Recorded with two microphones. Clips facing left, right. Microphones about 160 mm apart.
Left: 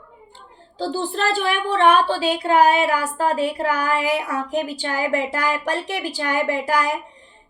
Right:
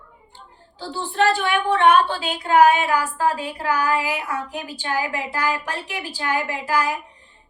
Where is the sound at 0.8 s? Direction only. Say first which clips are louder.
Right 1 dB; 35° left (ahead or behind).